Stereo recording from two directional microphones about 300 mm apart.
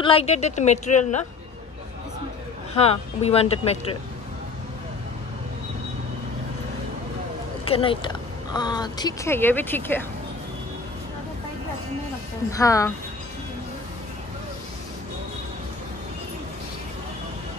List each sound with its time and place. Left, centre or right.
0.0 s speech: centre
2.7 s speech: centre
7.6 s speech: centre
12.4 s speech: centre